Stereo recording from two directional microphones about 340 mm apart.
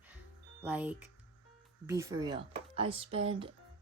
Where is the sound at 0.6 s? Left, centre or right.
Centre.